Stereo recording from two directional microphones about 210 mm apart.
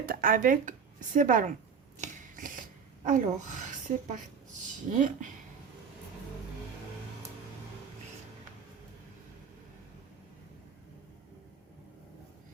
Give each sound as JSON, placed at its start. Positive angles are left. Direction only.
{"t": 0.0, "sound": "speech", "side_deg": -45}
{"t": 2.0, "sound": "a sound", "side_deg": -40}
{"t": 3.9, "sound": "speech", "side_deg": -40}